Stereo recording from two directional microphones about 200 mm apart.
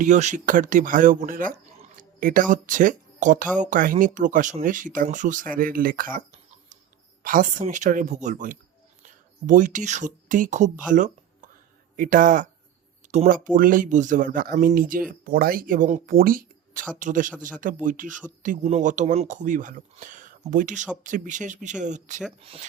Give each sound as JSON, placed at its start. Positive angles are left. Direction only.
{"t": 0.0, "sound": "speech", "side_deg": -35}
{"t": 10.8, "sound": "a sound", "side_deg": -40}
{"t": 11.9, "sound": "speech", "side_deg": -45}